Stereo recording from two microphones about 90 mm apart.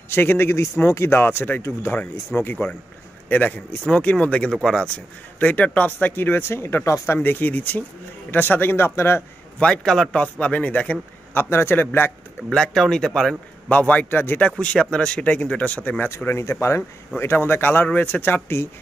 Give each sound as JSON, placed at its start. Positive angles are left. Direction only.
{"t": 0.1, "sound": "speech", "side_deg": 25}
{"t": 9.6, "sound": "speech", "side_deg": 10}
{"t": 12.4, "sound": "speech", "side_deg": 10}